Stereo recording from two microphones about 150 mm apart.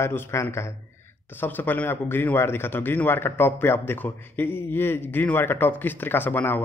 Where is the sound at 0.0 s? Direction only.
15° left (ahead or behind).